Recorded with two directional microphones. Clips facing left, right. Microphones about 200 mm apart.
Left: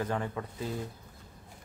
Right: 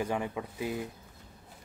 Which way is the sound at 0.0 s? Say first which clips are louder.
Right 1 dB; 10° right (ahead or behind).